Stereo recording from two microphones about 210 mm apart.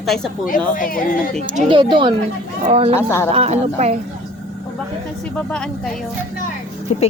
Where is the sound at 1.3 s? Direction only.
30° right (ahead or behind).